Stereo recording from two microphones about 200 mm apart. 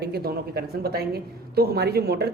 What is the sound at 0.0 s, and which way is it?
A woman's voice, 50° right (ahead or behind).